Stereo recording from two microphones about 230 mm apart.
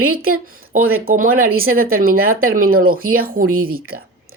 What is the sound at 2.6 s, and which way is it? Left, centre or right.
Speech, right.